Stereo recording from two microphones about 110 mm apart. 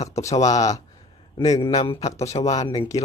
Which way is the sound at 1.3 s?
45° left (ahead or behind).